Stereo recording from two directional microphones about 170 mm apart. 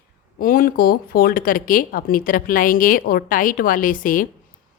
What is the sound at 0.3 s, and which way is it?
Speech, 55° left (ahead or behind).